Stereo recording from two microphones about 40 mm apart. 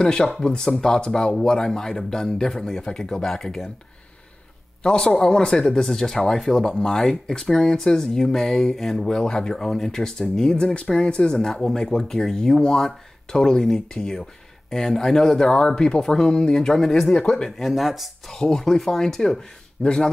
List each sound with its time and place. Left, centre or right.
0.0 s speech: centre
5.0 s speech: centre
17.2 s speech: centre
17.6 s speech: centre
18.3 s speech: centre